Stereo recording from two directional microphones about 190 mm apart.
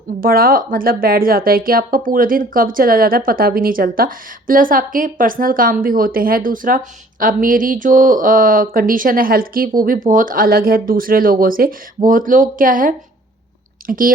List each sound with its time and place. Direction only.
0.2 s speech: 50° right (ahead or behind)